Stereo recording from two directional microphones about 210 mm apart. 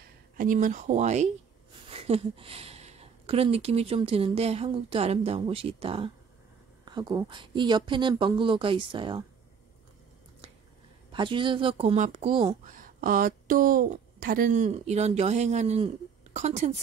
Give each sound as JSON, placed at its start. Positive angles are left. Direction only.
{"t": 0.4, "sound": "speech", "side_deg": -40}
{"t": 11.1, "sound": "speech", "side_deg": -25}
{"t": 12.6, "sound": "speech", "side_deg": -40}